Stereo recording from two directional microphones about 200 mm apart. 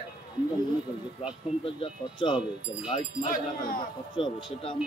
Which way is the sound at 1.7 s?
25° left (ahead or behind).